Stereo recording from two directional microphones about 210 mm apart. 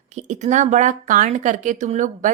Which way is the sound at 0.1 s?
35° right (ahead or behind).